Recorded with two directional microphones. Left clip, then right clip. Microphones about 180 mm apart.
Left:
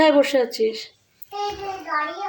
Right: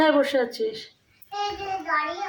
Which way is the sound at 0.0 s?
35° left (ahead or behind).